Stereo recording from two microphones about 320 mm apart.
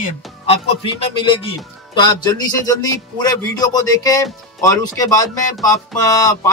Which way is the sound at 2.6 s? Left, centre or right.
Centre.